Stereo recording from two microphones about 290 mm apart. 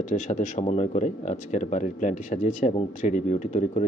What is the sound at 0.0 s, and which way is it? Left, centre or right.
Speech, left.